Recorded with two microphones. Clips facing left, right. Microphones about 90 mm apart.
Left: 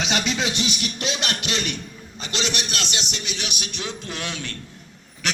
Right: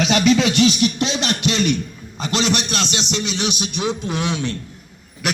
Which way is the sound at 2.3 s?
40° right (ahead or behind).